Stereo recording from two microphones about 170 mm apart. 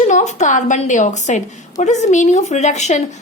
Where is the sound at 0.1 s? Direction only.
45° left (ahead or behind).